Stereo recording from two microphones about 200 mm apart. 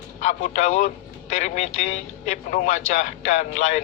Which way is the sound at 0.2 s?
35° left (ahead or behind).